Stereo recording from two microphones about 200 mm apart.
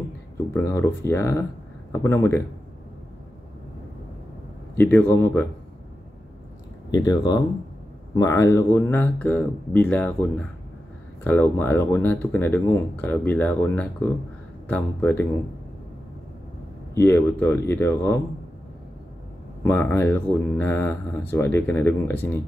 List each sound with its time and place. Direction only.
0.6 s speech: 15° left (ahead or behind)
4.7 s speech: 10° left (ahead or behind)
6.9 s speech: 20° left (ahead or behind)
11.2 s speech: 10° left (ahead or behind)
16.9 s speech: 10° left (ahead or behind)
19.6 s speech: 10° left (ahead or behind)